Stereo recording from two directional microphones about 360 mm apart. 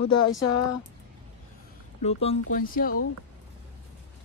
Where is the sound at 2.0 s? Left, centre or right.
Centre.